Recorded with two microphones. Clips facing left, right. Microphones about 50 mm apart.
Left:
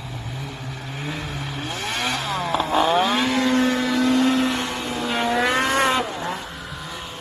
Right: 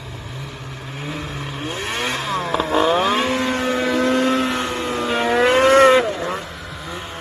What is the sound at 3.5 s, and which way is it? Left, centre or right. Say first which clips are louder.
Vehicle: left 1 dB; right.